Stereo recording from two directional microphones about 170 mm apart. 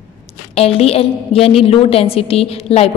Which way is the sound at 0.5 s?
35° left (ahead or behind).